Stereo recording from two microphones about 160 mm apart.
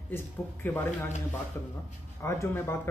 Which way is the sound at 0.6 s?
15° left (ahead or behind).